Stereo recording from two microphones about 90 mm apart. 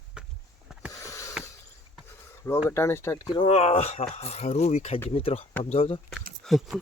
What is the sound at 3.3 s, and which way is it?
Speech, 90° left.